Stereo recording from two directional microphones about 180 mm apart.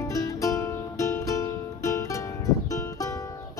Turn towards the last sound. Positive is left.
turn(degrees=20)  # may be behind; listen again after turning